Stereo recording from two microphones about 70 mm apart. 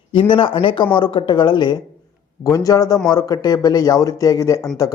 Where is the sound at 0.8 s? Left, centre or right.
Left.